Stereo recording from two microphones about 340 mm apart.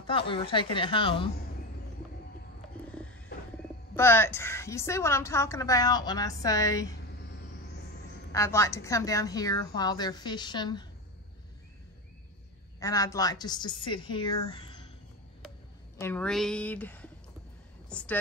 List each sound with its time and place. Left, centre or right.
0.0 s a woman's voice: centre
3.9 s a woman's voice: centre
8.3 s a woman's voice: centre
12.8 s a woman's voice: centre
16.0 s a woman's voice: centre